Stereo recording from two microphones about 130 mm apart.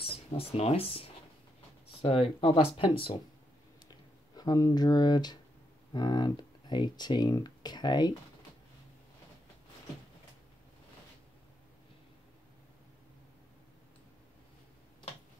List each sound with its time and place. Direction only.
0.0 s speech: 50° left (ahead or behind)
4.4 s speech: 30° left (ahead or behind)